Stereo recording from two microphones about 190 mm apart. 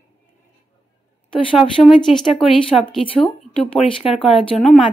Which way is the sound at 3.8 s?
Centre (ahead or behind).